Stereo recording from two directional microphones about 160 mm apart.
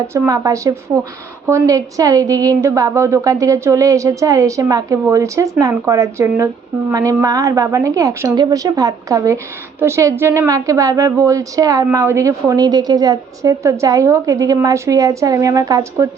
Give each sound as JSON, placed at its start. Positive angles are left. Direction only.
{"t": 0.1, "sound": "a woman's voice", "side_deg": -20}